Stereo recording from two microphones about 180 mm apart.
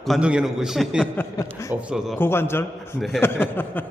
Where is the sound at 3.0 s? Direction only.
Centre (ahead or behind).